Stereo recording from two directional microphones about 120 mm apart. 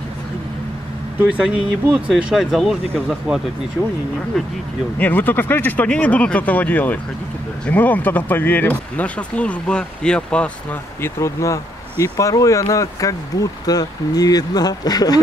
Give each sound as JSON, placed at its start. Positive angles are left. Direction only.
{"t": 1.2, "sound": "speech", "side_deg": -10}
{"t": 4.9, "sound": "speech", "side_deg": 15}
{"t": 11.1, "sound": "speech", "side_deg": 25}